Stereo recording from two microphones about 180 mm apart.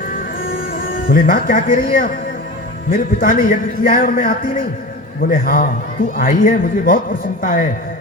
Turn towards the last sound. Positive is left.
turn(degrees=50)  # may be behind; listen again after turning